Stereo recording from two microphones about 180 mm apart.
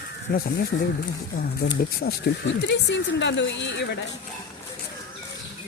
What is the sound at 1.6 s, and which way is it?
Speech, 60° left (ahead or behind).